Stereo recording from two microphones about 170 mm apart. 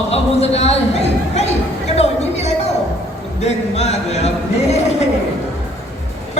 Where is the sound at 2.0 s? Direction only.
40° left (ahead or behind).